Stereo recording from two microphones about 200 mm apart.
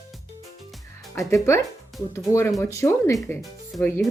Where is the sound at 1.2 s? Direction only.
15° left (ahead or behind).